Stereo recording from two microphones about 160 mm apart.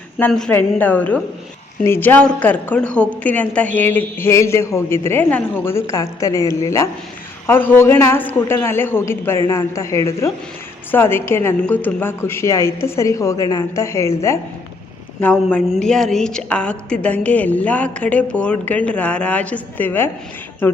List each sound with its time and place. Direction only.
0.2 s a woman's voice: 5° left (ahead or behind)